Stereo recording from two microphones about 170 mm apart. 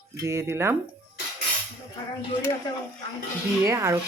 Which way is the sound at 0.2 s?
15° right (ahead or behind).